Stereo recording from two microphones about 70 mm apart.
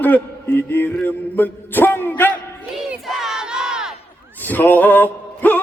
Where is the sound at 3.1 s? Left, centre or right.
Centre.